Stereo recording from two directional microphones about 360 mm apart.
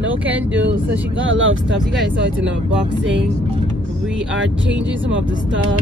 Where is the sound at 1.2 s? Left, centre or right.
Right.